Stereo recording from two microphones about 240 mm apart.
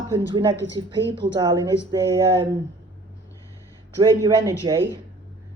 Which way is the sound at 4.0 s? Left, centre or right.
Centre.